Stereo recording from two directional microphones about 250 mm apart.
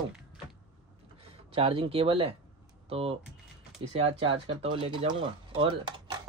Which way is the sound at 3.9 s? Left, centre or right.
Right.